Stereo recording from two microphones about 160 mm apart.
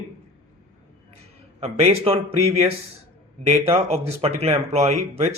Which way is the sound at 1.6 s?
40° right (ahead or behind).